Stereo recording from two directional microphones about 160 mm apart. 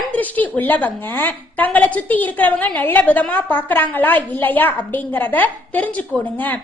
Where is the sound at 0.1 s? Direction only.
10° left (ahead or behind).